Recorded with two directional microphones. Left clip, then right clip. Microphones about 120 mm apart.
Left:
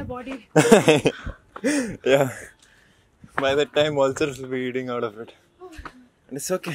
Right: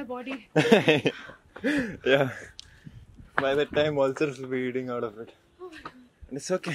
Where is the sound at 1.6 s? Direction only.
30° left (ahead or behind).